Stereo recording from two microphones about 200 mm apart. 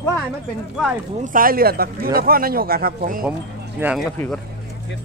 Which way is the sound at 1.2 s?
45° right (ahead or behind).